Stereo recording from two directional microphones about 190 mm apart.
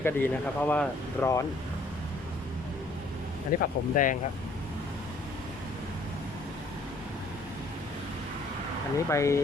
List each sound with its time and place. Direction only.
0.0 s speech: 10° left (ahead or behind)
3.5 s speech: 45° left (ahead or behind)
9.0 s speech: 15° left (ahead or behind)